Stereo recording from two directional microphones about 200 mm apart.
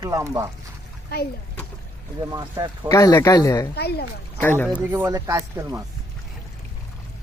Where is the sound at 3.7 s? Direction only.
55° left (ahead or behind).